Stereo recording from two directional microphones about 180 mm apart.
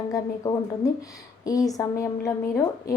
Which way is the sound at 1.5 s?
20° left (ahead or behind).